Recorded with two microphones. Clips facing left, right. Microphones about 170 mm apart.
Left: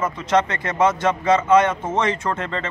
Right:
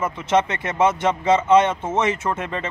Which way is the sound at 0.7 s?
25° right (ahead or behind).